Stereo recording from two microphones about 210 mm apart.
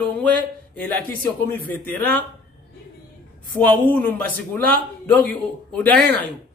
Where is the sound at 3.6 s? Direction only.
10° left (ahead or behind).